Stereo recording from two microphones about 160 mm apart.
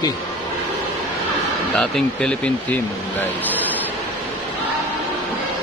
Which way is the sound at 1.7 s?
5° left (ahead or behind).